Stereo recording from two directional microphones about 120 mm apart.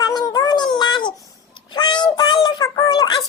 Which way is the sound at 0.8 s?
40° left (ahead or behind).